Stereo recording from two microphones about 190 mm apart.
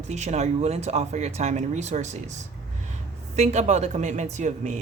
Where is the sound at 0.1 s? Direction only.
35° right (ahead or behind).